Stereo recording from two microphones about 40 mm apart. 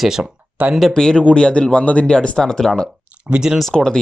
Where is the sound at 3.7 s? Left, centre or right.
Centre.